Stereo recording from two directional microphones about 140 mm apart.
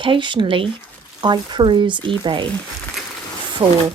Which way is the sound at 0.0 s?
35° right (ahead or behind).